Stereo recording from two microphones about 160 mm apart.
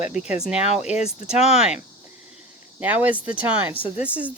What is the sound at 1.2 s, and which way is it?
Speech, 5° right (ahead or behind).